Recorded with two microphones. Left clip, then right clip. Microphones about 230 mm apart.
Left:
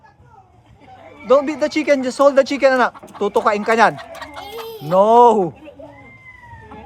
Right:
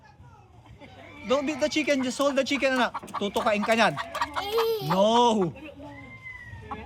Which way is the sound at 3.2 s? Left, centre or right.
Left.